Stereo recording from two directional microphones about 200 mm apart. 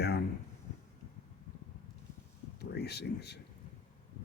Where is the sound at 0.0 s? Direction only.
55° left (ahead or behind).